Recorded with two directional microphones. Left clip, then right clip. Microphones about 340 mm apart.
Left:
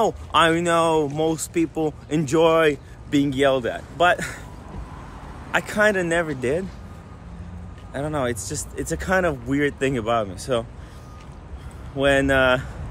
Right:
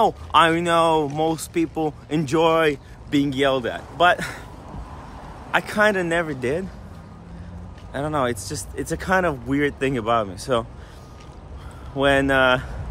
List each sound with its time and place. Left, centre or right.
0.0 s speech: centre
5.5 s speech: centre
7.9 s speech: centre
12.0 s speech: centre